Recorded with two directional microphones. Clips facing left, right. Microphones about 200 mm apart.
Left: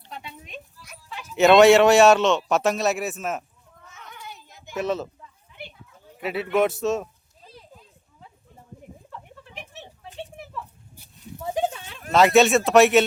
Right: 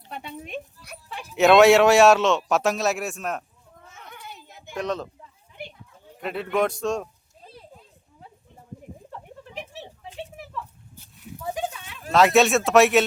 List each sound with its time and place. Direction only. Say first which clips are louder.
0.1 s speech: right 5 dB; 55° right (ahead or behind)
1.4 s a man's voice: left 1 dB; centre (ahead or behind)
3.9 s children playing: left 1 dB; 50° right (ahead or behind)
4.7 s a man's voice: left 2 dB; 5° left (ahead or behind)
6.1 s a man's voice: left 2 dB; 5° left (ahead or behind)
10.6 s a sound: right 1 dB; 10° left (ahead or behind)
11.3 s a sound: left 4 dB; 25° left (ahead or behind)
12.1 s a man's voice: left 1 dB; centre (ahead or behind)